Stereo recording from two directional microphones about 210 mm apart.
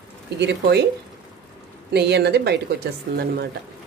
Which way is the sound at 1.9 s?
50° right (ahead or behind).